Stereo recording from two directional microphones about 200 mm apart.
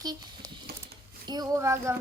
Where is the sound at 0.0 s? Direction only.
20° right (ahead or behind).